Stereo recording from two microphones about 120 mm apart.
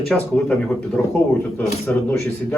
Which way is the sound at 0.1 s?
Centre (ahead or behind).